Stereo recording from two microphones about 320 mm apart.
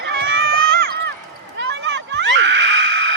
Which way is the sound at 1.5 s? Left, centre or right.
Right.